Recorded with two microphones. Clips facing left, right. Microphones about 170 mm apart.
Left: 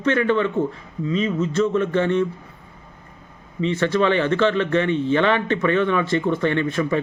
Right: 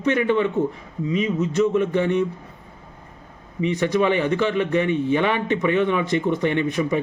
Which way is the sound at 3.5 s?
15° right (ahead or behind).